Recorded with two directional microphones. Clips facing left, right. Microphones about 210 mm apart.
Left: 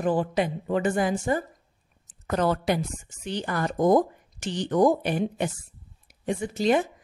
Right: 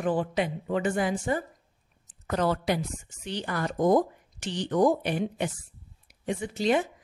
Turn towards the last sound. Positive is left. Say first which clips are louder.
# left 2 dB
turn(degrees=45)  # may be behind; listen again after turning